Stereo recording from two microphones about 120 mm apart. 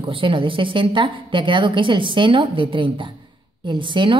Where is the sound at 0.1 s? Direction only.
45° right (ahead or behind).